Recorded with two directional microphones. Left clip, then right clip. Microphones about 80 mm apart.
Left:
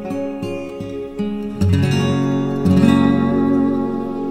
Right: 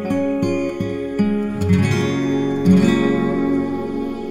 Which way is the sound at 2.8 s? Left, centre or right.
Left.